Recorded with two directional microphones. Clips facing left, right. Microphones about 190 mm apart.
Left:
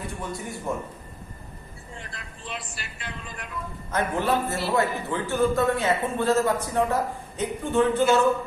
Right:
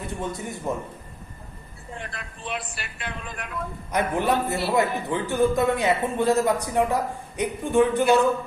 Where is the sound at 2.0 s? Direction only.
60° right (ahead or behind).